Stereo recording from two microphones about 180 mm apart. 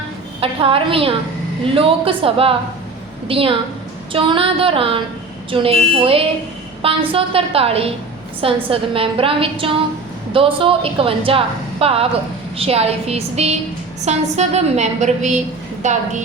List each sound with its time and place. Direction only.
0.3 s a woman's voice: 30° right (ahead or behind)
4.1 s a sound: 30° right (ahead or behind)
5.5 s a woman's voice: 30° right (ahead or behind)
6.8 s a woman's voice: 30° right (ahead or behind)